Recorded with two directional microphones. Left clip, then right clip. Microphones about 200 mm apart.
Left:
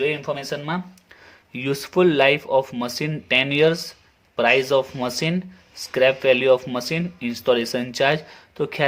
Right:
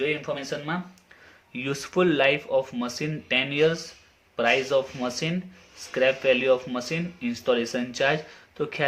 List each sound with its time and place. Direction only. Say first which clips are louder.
0.0 s speech: left 4 dB; 40° left (ahead or behind)